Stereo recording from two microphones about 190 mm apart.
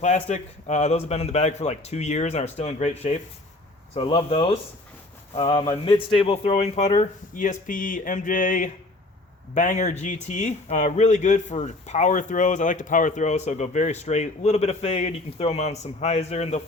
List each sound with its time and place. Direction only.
0.0 s speech: 40° left (ahead or behind)